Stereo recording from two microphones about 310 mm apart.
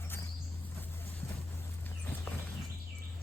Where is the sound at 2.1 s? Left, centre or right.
Centre.